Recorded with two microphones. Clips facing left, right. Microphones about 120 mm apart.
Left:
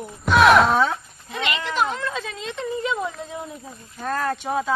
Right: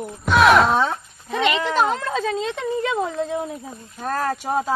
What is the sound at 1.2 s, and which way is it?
Speech, 40° right (ahead or behind).